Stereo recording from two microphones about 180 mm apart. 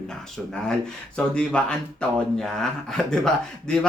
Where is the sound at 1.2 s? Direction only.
5° left (ahead or behind).